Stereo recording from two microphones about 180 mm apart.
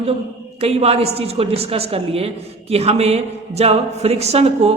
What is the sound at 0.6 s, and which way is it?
A woman's voice, 35° right (ahead or behind).